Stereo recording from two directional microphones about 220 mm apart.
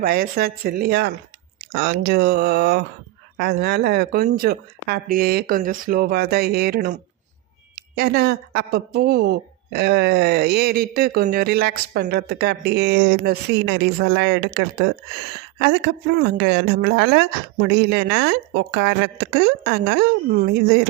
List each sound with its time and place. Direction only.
0.0 s speech: 45° right (ahead or behind)